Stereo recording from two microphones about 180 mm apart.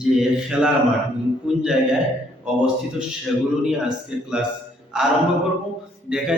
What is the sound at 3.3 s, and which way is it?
Speech, centre (ahead or behind).